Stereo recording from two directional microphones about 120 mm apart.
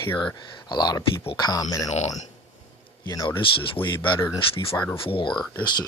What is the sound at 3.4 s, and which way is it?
Speech, 45° left (ahead or behind).